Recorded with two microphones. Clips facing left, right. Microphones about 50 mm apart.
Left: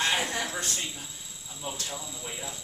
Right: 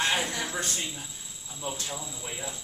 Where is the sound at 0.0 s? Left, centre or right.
Centre.